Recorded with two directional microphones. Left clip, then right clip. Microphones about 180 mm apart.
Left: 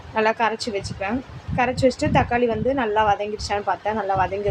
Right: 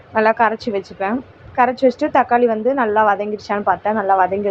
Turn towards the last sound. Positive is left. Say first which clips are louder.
# right 6 dB
turn(degrees=-15)  # may be behind; listen again after turning